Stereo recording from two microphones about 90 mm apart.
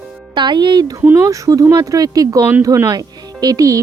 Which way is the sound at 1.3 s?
40° right (ahead or behind).